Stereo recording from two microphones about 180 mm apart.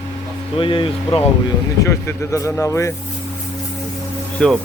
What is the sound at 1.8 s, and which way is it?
Speech, 15° left (ahead or behind).